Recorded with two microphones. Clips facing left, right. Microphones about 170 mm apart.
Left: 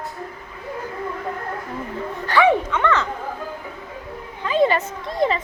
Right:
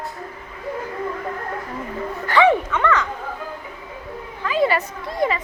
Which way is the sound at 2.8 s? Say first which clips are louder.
Even; 25° left (ahead or behind).